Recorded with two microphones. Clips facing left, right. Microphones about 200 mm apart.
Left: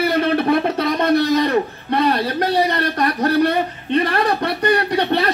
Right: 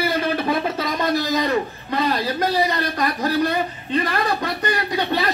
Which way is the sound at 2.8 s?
60° left (ahead or behind).